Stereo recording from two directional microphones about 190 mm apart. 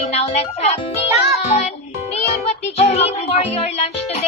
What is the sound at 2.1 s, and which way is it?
Music, 35° left (ahead or behind).